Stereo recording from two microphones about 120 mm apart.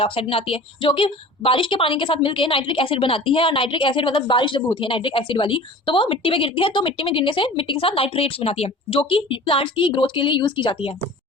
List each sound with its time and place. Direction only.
0.0 s a woman's voice: 50° left (ahead or behind)